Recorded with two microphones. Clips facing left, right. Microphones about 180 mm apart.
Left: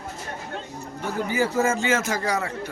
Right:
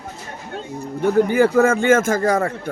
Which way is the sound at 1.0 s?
55° right (ahead or behind).